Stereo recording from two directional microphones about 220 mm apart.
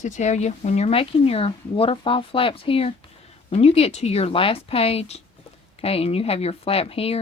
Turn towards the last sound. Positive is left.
turn(degrees=25)  # may be behind; listen again after turning